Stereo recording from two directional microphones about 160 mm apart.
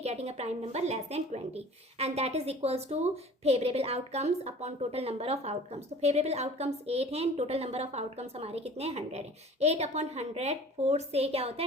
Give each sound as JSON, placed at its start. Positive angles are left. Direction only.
{"t": 0.0, "sound": "a woman's voice", "side_deg": -40}